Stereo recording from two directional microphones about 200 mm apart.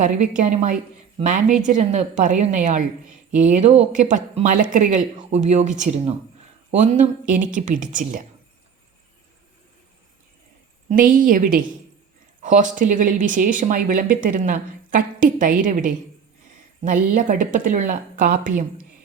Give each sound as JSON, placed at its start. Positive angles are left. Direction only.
{"t": 0.0, "sound": "speech", "side_deg": -40}
{"t": 10.8, "sound": "a woman's voice", "side_deg": -40}